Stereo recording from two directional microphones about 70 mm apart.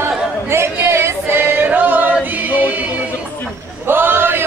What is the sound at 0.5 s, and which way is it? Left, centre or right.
Singing, right.